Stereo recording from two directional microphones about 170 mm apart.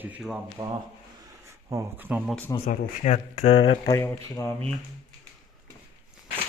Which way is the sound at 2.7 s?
45° left (ahead or behind).